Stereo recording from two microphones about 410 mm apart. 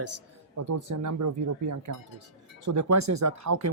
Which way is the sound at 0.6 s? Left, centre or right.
Right.